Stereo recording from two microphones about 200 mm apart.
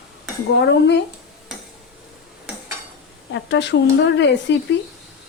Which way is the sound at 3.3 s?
60° left (ahead or behind).